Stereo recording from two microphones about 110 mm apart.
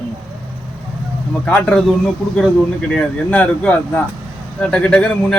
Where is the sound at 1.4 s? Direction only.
10° left (ahead or behind).